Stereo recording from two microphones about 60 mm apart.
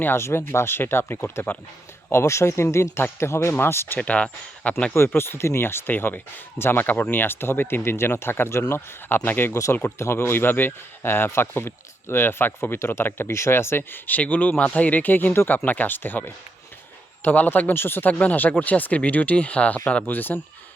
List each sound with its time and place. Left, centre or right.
0.0 s speech: left
1.5 s speech: left
2.1 s speech: left
3.9 s speech: left
4.9 s speech: left
9.5 s speech: left
10.0 s speech: left
18.1 s speech: left
20.1 s speech: left